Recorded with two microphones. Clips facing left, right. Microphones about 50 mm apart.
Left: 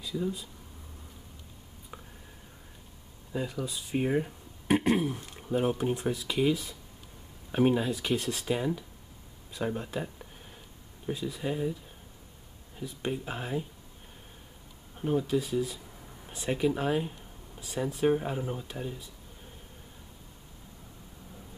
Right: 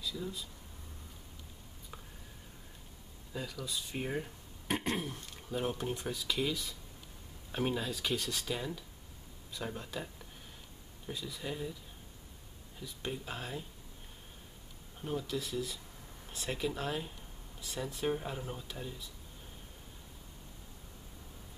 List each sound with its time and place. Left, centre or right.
0.0 s speech: centre
3.3 s speech: centre
15.0 s speech: centre